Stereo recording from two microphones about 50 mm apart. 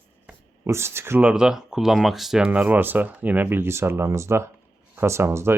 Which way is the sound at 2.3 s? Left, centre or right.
Right.